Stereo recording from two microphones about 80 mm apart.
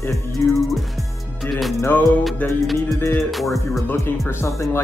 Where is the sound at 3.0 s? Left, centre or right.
Left.